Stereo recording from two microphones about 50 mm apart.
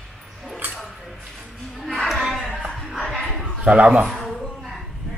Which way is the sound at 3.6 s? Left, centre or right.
Right.